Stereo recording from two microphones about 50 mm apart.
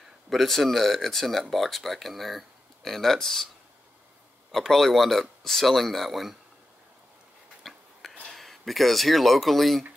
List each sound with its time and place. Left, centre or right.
0.3 s speech: centre
4.5 s speech: centre
7.6 s a sound: centre
8.3 s speech: centre